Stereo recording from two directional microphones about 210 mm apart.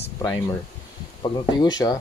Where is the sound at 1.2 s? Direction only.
20° left (ahead or behind).